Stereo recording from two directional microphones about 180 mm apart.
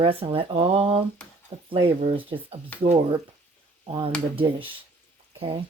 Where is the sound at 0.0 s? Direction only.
30° right (ahead or behind).